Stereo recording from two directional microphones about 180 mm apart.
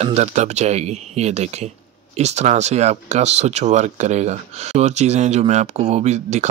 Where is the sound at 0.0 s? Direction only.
40° right (ahead or behind).